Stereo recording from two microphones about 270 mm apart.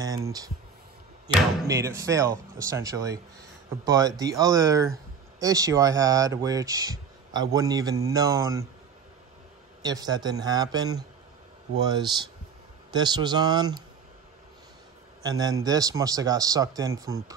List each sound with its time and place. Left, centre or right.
0.0 s speech: centre
9.8 s speech: centre
15.2 s speech: centre